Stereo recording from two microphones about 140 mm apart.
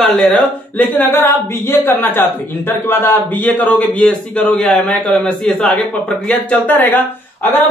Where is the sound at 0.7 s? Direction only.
15° left (ahead or behind).